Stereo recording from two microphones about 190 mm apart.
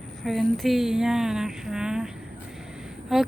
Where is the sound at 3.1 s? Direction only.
Centre (ahead or behind).